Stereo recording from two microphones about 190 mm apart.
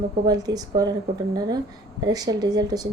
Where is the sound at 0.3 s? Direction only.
20° right (ahead or behind).